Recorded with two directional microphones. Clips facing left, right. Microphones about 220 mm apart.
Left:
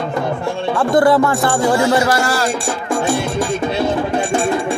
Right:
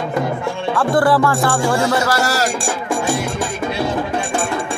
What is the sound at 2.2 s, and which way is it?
Music, 40° right (ahead or behind).